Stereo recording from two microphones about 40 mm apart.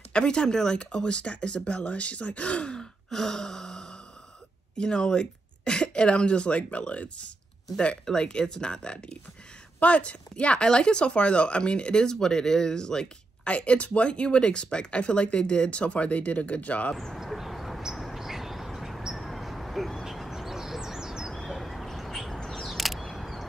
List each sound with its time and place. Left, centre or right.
0.1 s speech: left
16.9 s speech: centre
17.3 s a sound: centre
17.9 s bird: centre
21.3 s bird: centre
22.5 s single-lens reflex camera: centre